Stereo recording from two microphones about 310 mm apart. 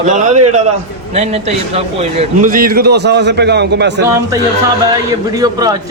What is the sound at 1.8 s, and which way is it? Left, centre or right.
A man's voice, right.